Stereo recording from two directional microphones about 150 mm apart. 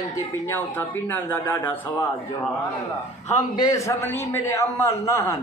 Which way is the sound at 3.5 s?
25° left (ahead or behind).